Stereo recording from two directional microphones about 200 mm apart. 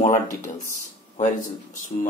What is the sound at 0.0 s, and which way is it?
Speech, 35° left (ahead or behind).